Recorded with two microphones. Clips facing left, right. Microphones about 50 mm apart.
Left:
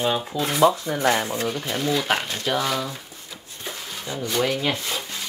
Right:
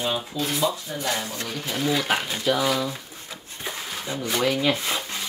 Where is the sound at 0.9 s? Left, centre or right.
Left.